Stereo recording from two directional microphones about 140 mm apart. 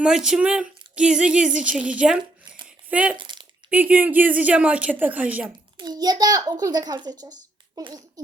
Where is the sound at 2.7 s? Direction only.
10° right (ahead or behind).